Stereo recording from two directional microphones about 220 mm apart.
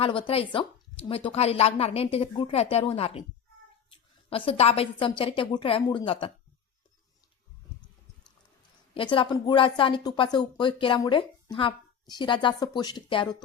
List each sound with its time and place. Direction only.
0.0 s speech: 25° left (ahead or behind)
9.0 s speech: 20° left (ahead or behind)